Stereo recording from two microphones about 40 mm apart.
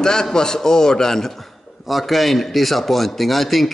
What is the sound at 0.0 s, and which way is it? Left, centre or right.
A man's voice, centre.